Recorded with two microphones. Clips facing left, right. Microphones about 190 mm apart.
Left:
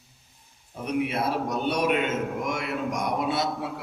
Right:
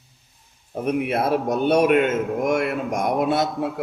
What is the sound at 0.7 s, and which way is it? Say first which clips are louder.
A man's voice: right 5 dB; 55° right (ahead or behind).